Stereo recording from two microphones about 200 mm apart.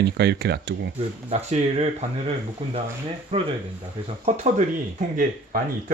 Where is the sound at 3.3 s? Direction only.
35° right (ahead or behind).